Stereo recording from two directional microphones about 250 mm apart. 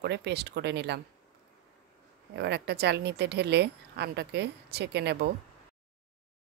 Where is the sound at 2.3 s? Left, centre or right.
Right.